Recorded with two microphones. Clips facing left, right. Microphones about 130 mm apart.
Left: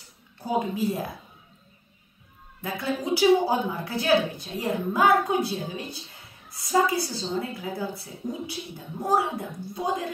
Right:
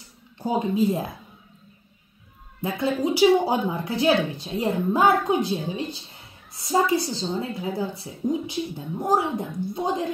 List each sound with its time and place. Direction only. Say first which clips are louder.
0.4 s a woman's voice: right 4 dB; 20° right (ahead or behind)
2.6 s a woman's voice: right 5 dB; 20° right (ahead or behind)